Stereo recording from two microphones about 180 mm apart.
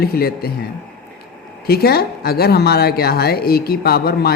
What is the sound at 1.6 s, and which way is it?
A woman's voice, 60° left (ahead or behind).